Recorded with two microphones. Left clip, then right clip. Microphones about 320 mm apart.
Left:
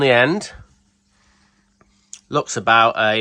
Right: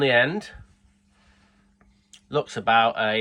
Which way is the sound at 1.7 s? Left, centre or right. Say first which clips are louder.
Left 10 dB; centre.